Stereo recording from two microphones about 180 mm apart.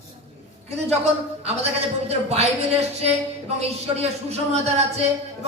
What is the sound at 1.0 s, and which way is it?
A man's voice, 35° right (ahead or behind).